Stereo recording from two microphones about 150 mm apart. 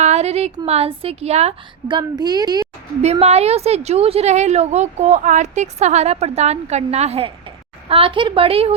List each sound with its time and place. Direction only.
0.0 s a woman's voice: 45° right (ahead or behind)
1.9 s speech: 30° right (ahead or behind)
3.0 s a woman's voice: 45° right (ahead or behind)